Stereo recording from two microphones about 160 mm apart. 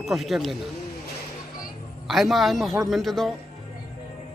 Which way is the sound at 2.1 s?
Centre (ahead or behind).